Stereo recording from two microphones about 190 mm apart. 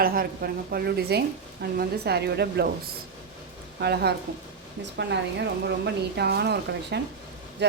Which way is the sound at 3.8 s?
60° right (ahead or behind).